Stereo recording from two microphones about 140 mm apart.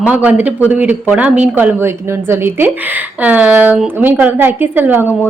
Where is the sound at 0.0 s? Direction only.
10° right (ahead or behind).